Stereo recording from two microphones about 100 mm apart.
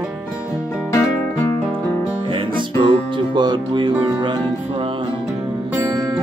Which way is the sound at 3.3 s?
50° right (ahead or behind).